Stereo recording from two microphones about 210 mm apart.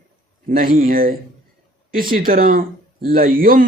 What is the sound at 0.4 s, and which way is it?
Speech, 40° right (ahead or behind).